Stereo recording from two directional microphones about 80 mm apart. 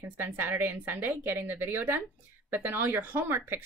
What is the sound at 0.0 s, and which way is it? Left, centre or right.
Speech, right.